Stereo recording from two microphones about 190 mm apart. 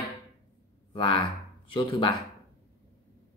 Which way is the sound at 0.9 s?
30° left (ahead or behind).